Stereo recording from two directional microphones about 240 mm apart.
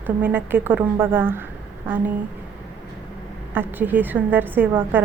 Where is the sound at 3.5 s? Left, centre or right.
Centre.